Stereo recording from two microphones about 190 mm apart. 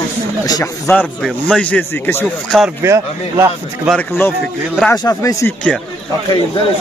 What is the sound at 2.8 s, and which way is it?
Speech, 15° right (ahead or behind).